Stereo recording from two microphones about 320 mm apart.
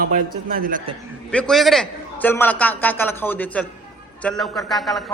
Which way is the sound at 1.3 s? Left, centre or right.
Centre.